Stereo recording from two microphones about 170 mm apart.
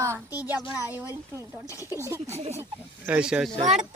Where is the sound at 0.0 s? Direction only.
15° right (ahead or behind).